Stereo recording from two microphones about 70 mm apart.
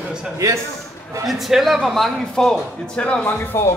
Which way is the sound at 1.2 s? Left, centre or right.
Centre.